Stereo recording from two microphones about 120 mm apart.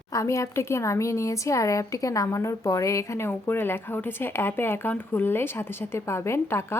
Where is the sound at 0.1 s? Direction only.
25° left (ahead or behind).